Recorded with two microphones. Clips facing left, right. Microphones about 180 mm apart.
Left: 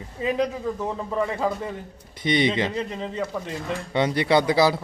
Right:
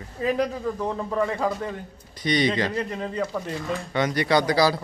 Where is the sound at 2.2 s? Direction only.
25° left (ahead or behind).